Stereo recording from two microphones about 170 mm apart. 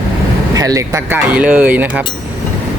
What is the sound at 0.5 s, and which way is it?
Speech, 20° right (ahead or behind).